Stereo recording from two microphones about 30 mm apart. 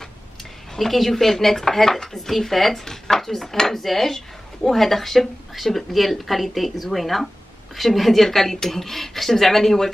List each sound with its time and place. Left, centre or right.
0.7 s a woman's voice: centre